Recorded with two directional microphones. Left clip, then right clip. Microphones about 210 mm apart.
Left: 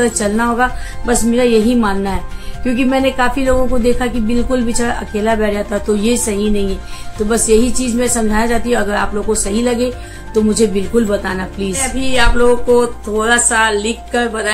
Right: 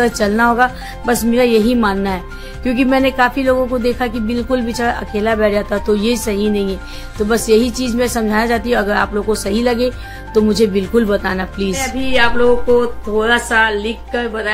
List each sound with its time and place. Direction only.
0.0 s a woman's voice: 50° right (ahead or behind)
11.7 s music: 5° left (ahead or behind)